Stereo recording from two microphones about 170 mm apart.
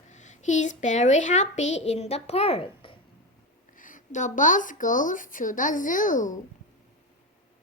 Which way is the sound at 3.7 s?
50° left (ahead or behind).